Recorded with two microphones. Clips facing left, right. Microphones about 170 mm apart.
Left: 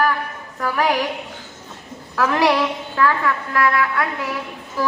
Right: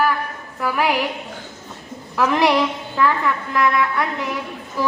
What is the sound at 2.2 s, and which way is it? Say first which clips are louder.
Speech: even; 15° right (ahead or behind).